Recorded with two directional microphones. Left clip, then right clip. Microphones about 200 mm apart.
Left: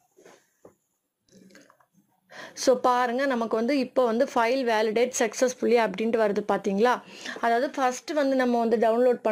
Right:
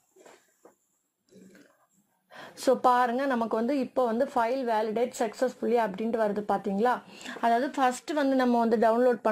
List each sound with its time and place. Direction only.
2.2 s a woman's voice: 5° left (ahead or behind)